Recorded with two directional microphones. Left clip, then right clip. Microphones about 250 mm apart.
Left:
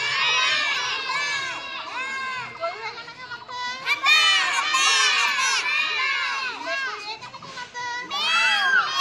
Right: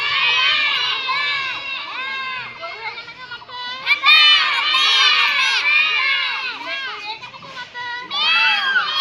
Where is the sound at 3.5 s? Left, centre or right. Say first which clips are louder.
Right 6 dB; centre.